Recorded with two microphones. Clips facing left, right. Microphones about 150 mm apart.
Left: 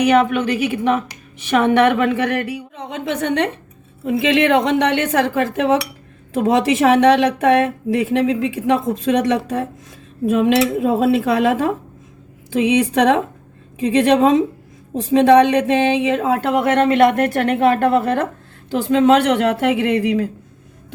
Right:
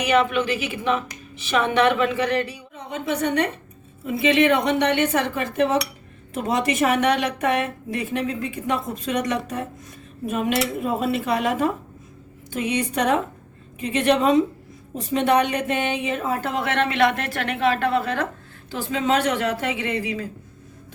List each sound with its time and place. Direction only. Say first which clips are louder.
0.0 s a woman's voice: left 5 dB; 50° left (ahead or behind)
4.0 s a woman's voice: left 3 dB; 75° left (ahead or behind)
10.3 s a woman's voice: left 8 dB; 80° left; by 16.7 s 60° left (ahead or behind)
16.7 s a woman's voice: left 6 dB; 50° left (ahead or behind)
18.7 s a woman's voice: left 9 dB; 65° left (ahead or behind)